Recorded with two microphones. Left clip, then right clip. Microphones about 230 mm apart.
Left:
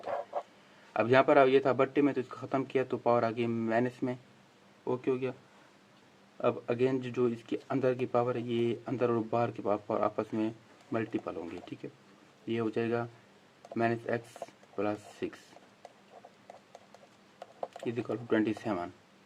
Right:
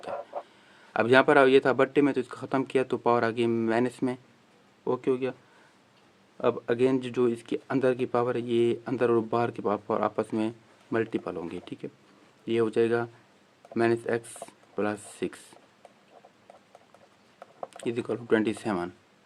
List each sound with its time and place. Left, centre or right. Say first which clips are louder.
0.9 s speech: right 4 dB; right
6.4 s speech: right 5 dB; right
17.8 s speech: right 5 dB; right